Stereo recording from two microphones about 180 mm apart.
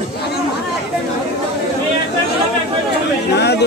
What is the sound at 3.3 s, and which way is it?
Chatter, 70° left (ahead or behind).